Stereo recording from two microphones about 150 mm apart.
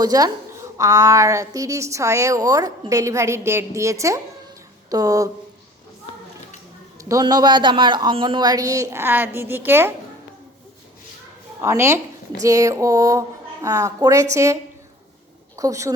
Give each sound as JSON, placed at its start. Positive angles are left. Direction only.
{"t": 0.0, "sound": "a woman's voice", "side_deg": -25}
{"t": 7.0, "sound": "a woman's voice", "side_deg": -25}
{"t": 11.6, "sound": "a woman's voice", "side_deg": -15}